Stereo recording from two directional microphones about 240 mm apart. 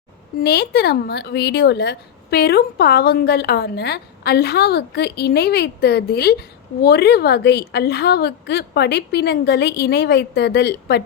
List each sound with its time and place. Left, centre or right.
0.3 s a woman's voice: left